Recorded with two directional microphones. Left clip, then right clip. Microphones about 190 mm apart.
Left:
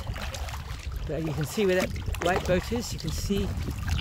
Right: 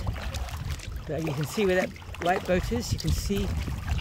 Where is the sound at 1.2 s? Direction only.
50° right (ahead or behind).